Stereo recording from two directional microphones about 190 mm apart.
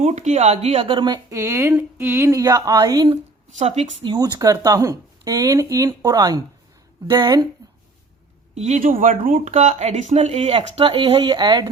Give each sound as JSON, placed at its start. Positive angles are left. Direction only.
{"t": 0.0, "sound": "speech", "side_deg": -40}
{"t": 3.6, "sound": "speech", "side_deg": -35}
{"t": 8.5, "sound": "speech", "side_deg": -40}